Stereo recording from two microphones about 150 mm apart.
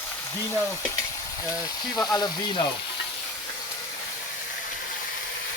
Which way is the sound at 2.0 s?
25° left (ahead or behind).